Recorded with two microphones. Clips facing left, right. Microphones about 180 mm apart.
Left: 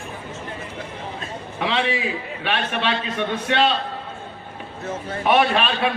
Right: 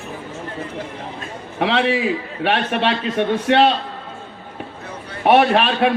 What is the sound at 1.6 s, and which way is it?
A man's voice, 60° right (ahead or behind).